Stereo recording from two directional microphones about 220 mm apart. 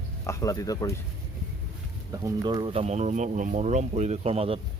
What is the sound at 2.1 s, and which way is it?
Speech, 20° right (ahead or behind).